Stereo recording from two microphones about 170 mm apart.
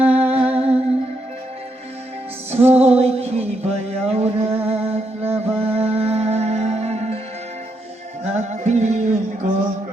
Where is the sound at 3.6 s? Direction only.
40° right (ahead or behind).